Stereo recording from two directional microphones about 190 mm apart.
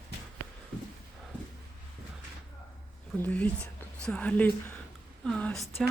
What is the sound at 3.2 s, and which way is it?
Speech, 10° left (ahead or behind).